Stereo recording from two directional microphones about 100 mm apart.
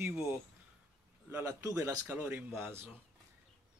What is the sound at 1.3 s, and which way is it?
Speech, 30° right (ahead or behind).